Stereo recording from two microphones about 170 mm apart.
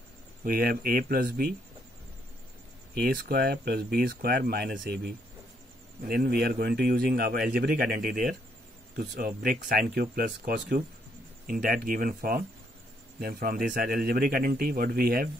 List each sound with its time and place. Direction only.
0.5 s speech: 60° right (ahead or behind)
3.0 s speech: 60° right (ahead or behind)